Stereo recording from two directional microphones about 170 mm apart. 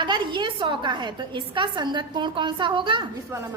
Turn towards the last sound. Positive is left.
turn(degrees=-15)  # may be behind; listen again after turning